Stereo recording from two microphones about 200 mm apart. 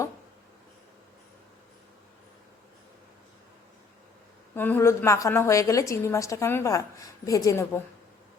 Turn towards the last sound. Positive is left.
turn(degrees=15)  # may be behind; listen again after turning